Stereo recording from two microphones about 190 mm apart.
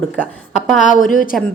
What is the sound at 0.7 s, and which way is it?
Speech, centre (ahead or behind).